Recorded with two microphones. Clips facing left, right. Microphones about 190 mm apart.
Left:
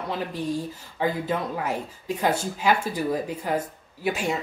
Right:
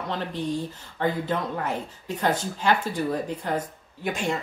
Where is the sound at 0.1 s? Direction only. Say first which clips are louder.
Even; 10° left (ahead or behind).